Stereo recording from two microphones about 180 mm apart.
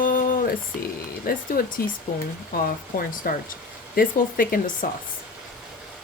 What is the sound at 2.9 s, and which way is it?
Speech, 50° left (ahead or behind).